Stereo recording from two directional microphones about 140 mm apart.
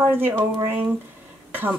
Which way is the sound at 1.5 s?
15° right (ahead or behind).